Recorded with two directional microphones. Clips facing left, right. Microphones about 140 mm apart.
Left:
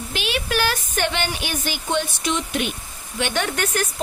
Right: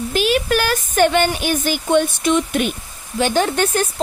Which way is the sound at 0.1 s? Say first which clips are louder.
Right 7 dB; 45° right (ahead or behind).